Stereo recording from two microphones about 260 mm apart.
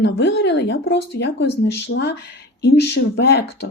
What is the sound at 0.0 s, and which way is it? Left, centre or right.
Speech, left.